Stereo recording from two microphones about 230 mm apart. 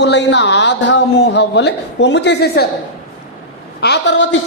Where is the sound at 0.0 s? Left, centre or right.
Left.